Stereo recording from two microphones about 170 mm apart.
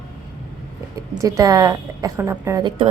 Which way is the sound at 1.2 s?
20° right (ahead or behind).